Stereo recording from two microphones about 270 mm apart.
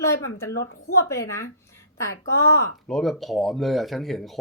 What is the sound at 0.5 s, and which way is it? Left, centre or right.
Speech, left.